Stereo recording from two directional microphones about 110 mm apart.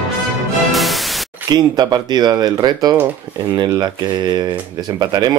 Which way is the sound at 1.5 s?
40° right (ahead or behind).